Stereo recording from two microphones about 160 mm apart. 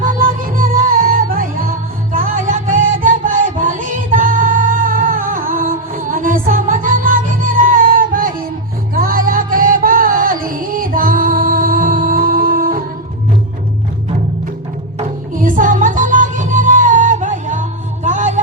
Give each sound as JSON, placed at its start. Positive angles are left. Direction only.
{"t": 0.0, "sound": "music", "side_deg": -60}
{"t": 14.9, "sound": "music", "side_deg": -55}